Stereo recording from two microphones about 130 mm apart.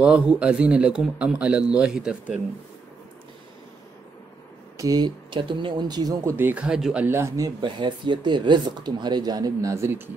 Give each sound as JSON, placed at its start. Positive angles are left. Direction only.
{"t": 0.0, "sound": "a man's voice", "side_deg": -5}
{"t": 4.7, "sound": "speech", "side_deg": -30}
{"t": 6.3, "sound": "a man's voice", "side_deg": -15}
{"t": 6.6, "sound": "speech", "side_deg": -5}